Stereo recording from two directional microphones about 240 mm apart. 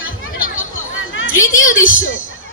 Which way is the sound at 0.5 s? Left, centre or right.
Left.